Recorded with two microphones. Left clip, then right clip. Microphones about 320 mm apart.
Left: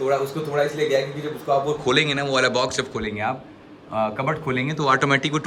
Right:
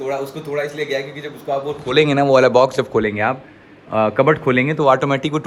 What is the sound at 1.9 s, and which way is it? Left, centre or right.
A man's voice, centre.